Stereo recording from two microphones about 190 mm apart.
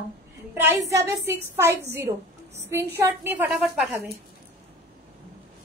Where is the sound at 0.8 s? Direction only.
15° right (ahead or behind).